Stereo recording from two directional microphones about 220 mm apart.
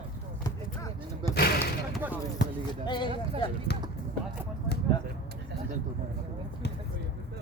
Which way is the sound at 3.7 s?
50° left (ahead or behind).